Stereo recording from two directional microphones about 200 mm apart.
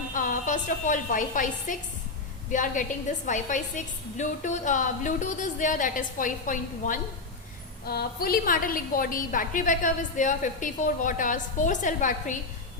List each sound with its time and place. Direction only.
0.1 s a woman's voice: 40° left (ahead or behind)